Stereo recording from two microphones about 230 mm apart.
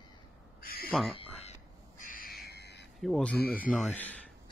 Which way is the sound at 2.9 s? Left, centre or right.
Centre.